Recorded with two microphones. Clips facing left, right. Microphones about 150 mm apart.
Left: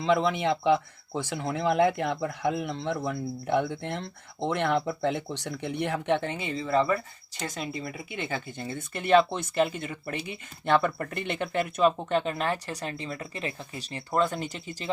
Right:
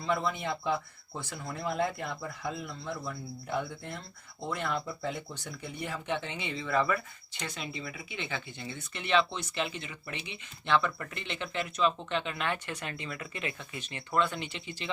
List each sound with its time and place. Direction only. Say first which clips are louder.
0.0 s speech: left 7 dB; 90° left; by 14.8 s 45° left (ahead or behind)